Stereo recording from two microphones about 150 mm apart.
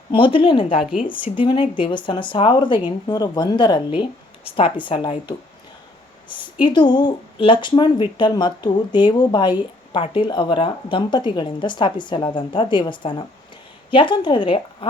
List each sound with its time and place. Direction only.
0.1 s speech: 35° left (ahead or behind)
0.8 s speech: 5° right (ahead or behind)
1.1 s speech: 35° left (ahead or behind)